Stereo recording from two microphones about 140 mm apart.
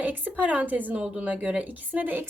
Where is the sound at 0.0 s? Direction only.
10° right (ahead or behind).